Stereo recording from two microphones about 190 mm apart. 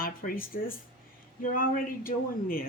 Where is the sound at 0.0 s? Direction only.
50° left (ahead or behind).